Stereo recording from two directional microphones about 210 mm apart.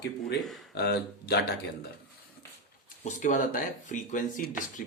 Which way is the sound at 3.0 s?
35° left (ahead or behind).